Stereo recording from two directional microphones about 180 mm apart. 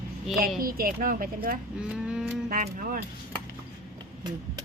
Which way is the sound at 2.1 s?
Centre (ahead or behind).